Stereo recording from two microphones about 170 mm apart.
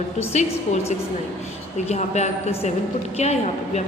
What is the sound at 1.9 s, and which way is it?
A woman's voice, 40° left (ahead or behind).